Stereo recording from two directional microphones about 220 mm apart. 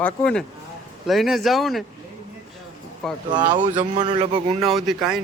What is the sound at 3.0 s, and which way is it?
Speech, centre (ahead or behind).